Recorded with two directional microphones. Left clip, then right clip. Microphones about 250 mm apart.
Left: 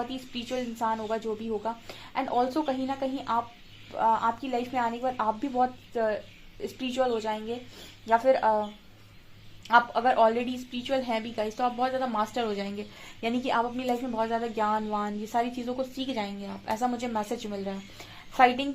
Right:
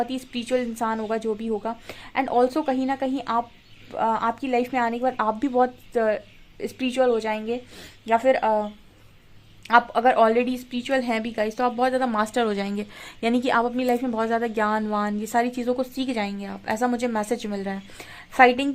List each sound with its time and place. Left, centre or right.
0.1 s a woman's voice: right
9.6 s a woman's voice: right